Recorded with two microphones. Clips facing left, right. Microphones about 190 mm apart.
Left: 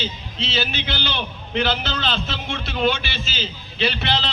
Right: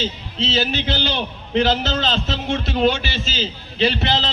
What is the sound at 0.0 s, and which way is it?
A man's voice, 40° right (ahead or behind).